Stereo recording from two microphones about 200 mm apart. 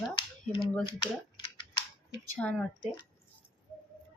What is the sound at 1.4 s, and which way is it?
Typing, 25° left (ahead or behind).